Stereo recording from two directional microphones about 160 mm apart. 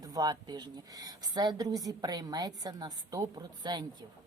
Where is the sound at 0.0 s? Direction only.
25° right (ahead or behind).